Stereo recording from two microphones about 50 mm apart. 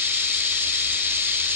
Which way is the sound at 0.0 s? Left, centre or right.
Right.